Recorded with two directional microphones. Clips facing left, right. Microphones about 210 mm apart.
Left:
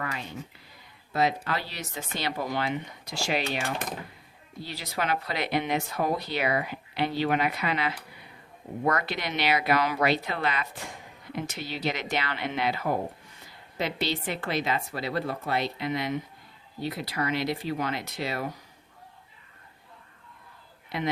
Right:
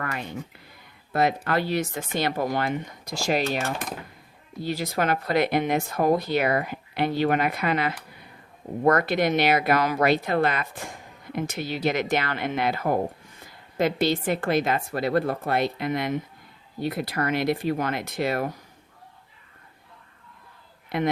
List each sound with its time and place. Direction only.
0.0 s a sound: 55° right (ahead or behind)
1.1 s speech: 55° right (ahead or behind)
20.9 s speech: 50° right (ahead or behind)